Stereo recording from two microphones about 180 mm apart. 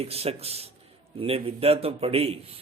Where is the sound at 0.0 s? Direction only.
35° right (ahead or behind).